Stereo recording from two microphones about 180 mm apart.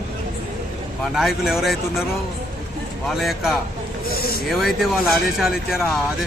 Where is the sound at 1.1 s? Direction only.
Centre (ahead or behind).